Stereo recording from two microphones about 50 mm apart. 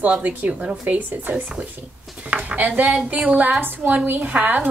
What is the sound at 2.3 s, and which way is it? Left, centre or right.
Dishes, right.